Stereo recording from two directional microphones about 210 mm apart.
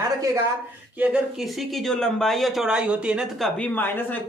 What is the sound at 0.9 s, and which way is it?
Speech, 5° right (ahead or behind).